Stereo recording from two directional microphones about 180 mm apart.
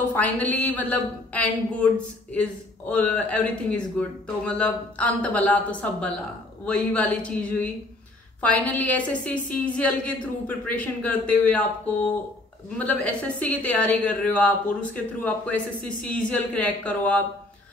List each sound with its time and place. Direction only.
0.1 s a woman's voice: 10° left (ahead or behind)
2.9 s a woman's voice: 5° left (ahead or behind)